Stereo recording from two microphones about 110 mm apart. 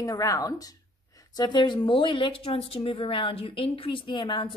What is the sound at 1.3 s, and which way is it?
A woman's voice, 40° left (ahead or behind).